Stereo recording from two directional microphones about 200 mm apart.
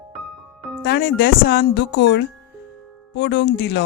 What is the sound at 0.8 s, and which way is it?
Speech, 55° left (ahead or behind).